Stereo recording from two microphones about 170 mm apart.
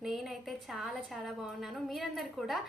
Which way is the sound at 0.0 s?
Centre (ahead or behind).